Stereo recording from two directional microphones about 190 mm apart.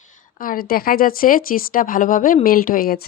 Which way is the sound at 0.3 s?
45° left (ahead or behind).